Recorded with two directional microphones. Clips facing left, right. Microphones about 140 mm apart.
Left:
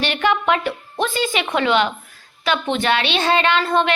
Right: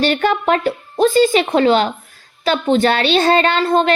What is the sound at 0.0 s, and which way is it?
A woman's voice, 40° right (ahead or behind).